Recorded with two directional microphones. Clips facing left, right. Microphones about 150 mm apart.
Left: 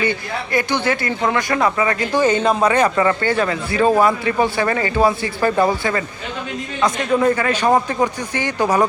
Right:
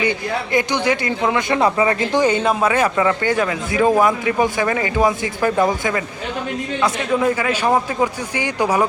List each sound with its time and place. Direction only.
0.5 s speech: 15° right (ahead or behind)
2.2 s a man's voice: 10° right (ahead or behind)
6.8 s a man's voice: 10° right (ahead or behind)